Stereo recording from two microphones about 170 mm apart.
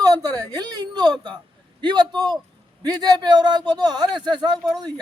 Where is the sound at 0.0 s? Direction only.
25° right (ahead or behind).